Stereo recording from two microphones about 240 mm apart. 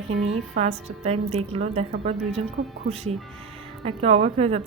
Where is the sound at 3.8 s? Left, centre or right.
Right.